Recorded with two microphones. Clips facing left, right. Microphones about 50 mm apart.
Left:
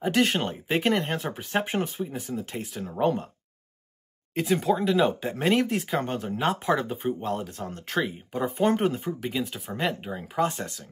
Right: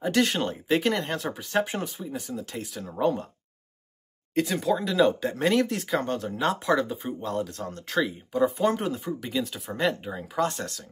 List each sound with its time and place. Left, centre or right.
0.0 s speech: centre
4.4 s speech: centre
8.0 s speech: left; by 10.8 s centre